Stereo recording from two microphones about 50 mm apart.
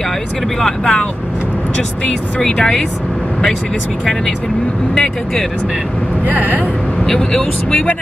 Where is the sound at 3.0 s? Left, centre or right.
Centre.